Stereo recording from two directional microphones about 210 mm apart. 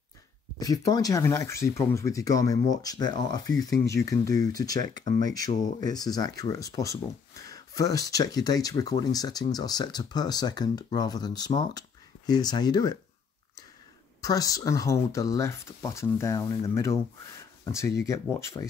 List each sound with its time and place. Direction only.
0.6 s speech: 15° left (ahead or behind)
14.2 s speech: 15° left (ahead or behind)